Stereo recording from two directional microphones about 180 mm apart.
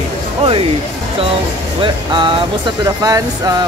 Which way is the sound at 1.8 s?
25° right (ahead or behind).